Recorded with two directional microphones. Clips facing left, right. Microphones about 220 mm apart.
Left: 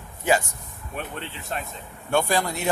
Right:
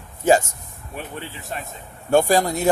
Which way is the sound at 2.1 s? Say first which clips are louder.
Right 6 dB; 40° right (ahead or behind).